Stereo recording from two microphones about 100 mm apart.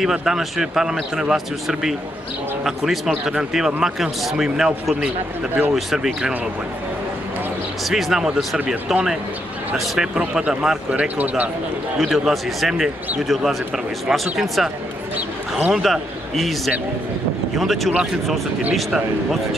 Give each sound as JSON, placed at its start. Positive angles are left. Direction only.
{"t": 0.0, "sound": "a man's voice", "side_deg": -5}
{"t": 7.8, "sound": "a man's voice", "side_deg": 0}
{"t": 12.0, "sound": "a man's voice", "side_deg": 0}